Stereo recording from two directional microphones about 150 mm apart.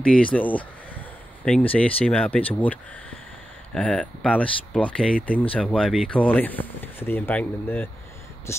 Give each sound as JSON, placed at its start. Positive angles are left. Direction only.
{"t": 0.0, "sound": "speech", "side_deg": 5}